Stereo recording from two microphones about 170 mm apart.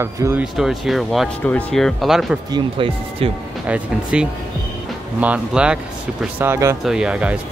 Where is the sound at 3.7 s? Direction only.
5° right (ahead or behind).